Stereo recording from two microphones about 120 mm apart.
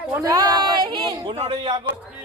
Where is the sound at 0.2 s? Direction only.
30° right (ahead or behind).